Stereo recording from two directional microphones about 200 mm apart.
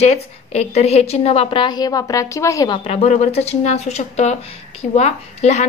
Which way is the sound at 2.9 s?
30° left (ahead or behind).